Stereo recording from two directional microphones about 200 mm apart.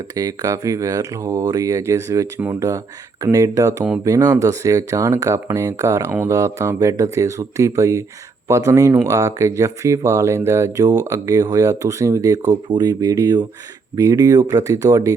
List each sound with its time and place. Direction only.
0.2 s speech: 15° right (ahead or behind)